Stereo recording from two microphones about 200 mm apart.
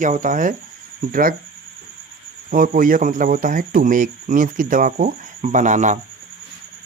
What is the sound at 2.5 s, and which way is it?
Speech, 45° right (ahead or behind).